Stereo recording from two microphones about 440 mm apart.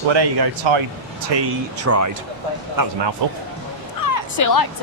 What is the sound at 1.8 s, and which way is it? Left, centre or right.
Speech, right.